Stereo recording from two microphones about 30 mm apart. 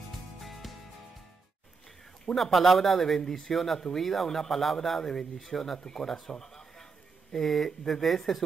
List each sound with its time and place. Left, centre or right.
0.4 s music: centre
2.3 s a man's voice: centre
3.2 s speech: left
3.5 s speech: centre
6.1 s a sound: centre
7.3 s a man's voice: centre